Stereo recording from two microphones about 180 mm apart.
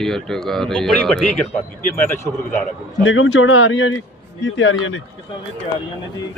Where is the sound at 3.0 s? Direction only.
90° left.